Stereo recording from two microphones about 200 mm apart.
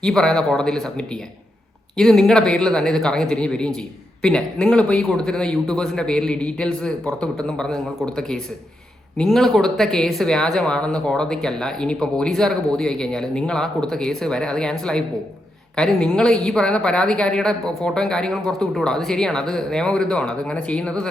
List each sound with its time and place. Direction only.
0.0 s speech: 5° left (ahead or behind)